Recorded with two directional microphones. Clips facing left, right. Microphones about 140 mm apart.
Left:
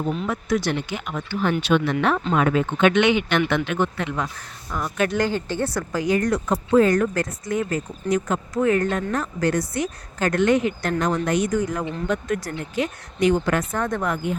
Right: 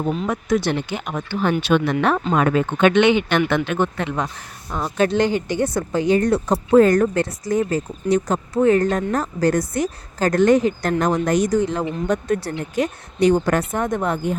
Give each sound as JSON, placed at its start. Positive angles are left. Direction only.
{"t": 0.3, "sound": "speech", "side_deg": -25}
{"t": 2.9, "sound": "speech", "side_deg": -30}
{"t": 3.5, "sound": "speech", "side_deg": -50}
{"t": 3.9, "sound": "speech", "side_deg": -35}
{"t": 11.6, "sound": "speech", "side_deg": -25}
{"t": 12.0, "sound": "speech", "side_deg": -40}
{"t": 13.7, "sound": "speech", "side_deg": -20}